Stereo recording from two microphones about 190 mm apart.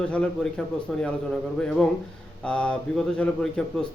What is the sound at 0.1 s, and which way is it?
A man's voice, 5° left (ahead or behind).